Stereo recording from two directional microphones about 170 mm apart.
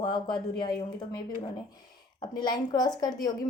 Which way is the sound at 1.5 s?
25° left (ahead or behind).